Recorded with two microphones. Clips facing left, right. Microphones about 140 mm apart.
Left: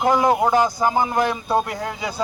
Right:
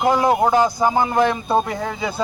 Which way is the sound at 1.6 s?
10° left (ahead or behind).